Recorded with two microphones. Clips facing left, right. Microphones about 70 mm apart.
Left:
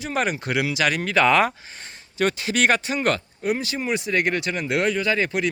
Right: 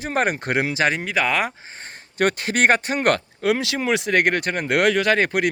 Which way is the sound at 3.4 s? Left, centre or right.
Right.